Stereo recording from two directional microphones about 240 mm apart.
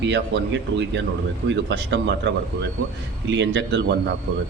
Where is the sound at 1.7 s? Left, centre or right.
Right.